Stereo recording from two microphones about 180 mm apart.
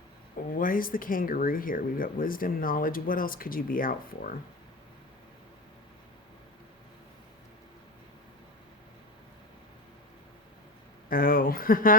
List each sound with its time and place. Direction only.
0.5 s speech: 50° left (ahead or behind)
11.1 s speech: 50° left (ahead or behind)